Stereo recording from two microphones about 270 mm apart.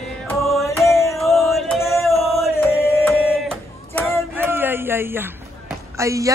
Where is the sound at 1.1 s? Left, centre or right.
Centre.